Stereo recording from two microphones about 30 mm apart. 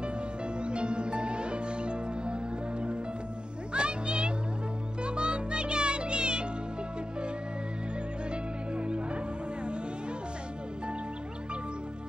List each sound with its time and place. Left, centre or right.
0.6 s music: right
8.3 s music: right